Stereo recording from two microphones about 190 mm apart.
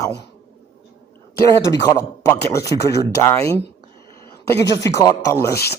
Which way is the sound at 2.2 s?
15° left (ahead or behind).